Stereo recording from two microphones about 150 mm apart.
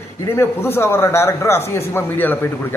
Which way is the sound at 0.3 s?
15° left (ahead or behind).